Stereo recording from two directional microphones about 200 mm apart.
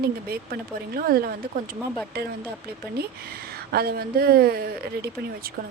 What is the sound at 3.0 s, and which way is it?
Speech, 50° right (ahead or behind).